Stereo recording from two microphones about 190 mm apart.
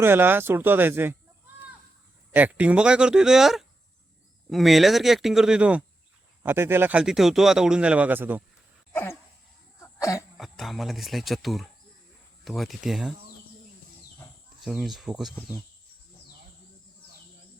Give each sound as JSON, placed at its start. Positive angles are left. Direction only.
{"t": 0.0, "sound": "speech", "side_deg": -10}
{"t": 2.3, "sound": "speech", "side_deg": -10}
{"t": 8.9, "sound": "a sound", "side_deg": 10}
{"t": 9.8, "sound": "cough", "side_deg": 15}
{"t": 10.3, "sound": "speech", "side_deg": 0}
{"t": 14.6, "sound": "speech", "side_deg": 0}